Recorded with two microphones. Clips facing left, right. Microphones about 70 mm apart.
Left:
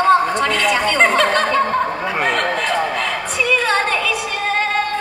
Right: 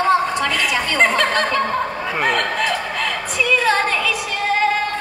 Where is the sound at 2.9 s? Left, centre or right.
Centre.